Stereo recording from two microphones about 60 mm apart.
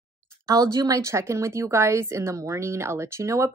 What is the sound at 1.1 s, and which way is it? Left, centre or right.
A woman's voice, right.